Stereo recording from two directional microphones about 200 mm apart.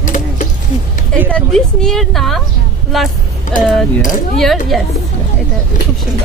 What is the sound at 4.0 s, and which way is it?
Speech, 40° left (ahead or behind).